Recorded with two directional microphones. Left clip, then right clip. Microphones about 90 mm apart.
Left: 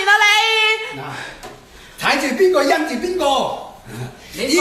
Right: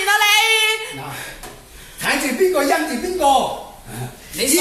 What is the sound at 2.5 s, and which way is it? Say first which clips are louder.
Speech: left 3 dB; 40° left (ahead or behind).